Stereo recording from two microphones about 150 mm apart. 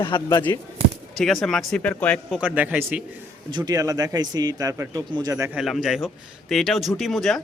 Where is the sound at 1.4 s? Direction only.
5° left (ahead or behind).